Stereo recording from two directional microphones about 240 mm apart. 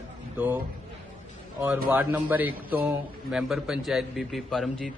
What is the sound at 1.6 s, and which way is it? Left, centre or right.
A man's voice, centre.